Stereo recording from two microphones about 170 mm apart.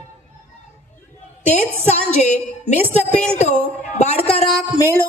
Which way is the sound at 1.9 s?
40° left (ahead or behind).